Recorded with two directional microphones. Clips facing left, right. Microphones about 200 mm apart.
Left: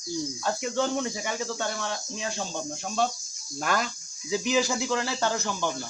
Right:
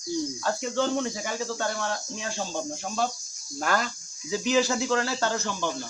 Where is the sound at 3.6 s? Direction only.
15° left (ahead or behind).